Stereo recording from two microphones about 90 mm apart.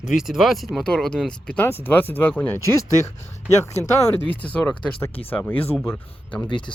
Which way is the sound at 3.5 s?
30° left (ahead or behind).